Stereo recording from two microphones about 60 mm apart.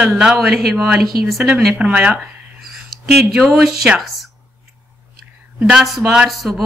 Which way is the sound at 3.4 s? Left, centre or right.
Centre.